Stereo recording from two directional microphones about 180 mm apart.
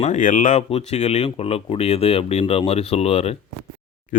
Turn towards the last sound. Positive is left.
turn(degrees=35)  # may be behind; listen again after turning